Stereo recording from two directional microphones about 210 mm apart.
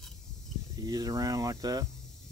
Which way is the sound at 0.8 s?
15° right (ahead or behind).